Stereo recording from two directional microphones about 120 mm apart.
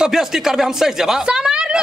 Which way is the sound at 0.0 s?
5° right (ahead or behind).